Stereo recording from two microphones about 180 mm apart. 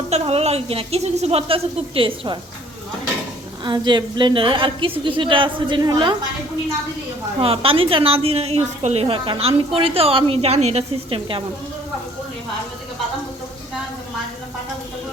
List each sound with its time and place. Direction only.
0.1 s a woman's voice: 35° right (ahead or behind)
3.6 s a woman's voice: 25° right (ahead or behind)
7.3 s a woman's voice: 30° right (ahead or behind)